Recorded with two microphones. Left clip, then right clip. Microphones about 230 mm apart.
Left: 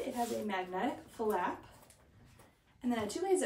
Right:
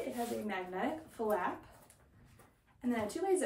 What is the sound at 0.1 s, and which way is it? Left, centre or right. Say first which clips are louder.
Speech: left 2 dB; centre.